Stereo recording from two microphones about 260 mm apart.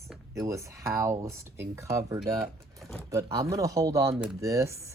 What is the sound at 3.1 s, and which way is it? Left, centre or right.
Speech, centre.